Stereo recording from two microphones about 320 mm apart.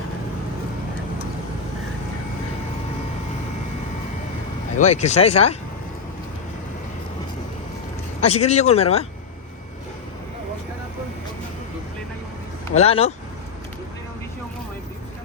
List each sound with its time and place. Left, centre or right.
4.8 s speech: left
8.2 s speech: centre
12.7 s speech: centre